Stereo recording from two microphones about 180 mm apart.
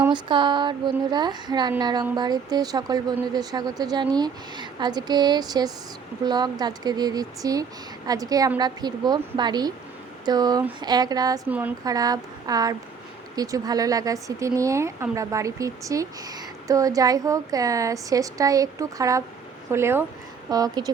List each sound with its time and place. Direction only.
0.1 s speech: 25° right (ahead or behind)
11.4 s speech: 10° right (ahead or behind)
11.9 s speech: 20° right (ahead or behind)